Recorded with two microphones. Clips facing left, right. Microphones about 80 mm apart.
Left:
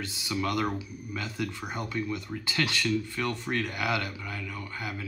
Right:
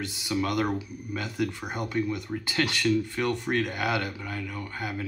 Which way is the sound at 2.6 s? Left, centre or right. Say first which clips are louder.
Right 3 dB; right.